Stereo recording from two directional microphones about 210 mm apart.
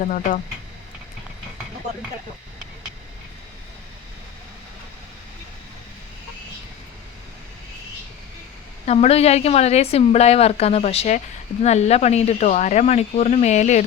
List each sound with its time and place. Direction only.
0.0 s speech: 40° left (ahead or behind)
8.9 s a woman's voice: 30° left (ahead or behind)